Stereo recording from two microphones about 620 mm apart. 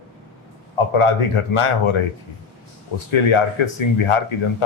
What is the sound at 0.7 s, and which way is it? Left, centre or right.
Speech, left.